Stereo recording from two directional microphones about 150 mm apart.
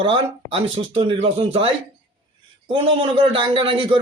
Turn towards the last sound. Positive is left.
turn(degrees=-35)  # may be behind; listen again after turning